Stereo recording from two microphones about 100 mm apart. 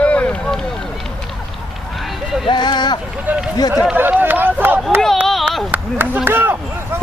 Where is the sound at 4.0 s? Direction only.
20° right (ahead or behind).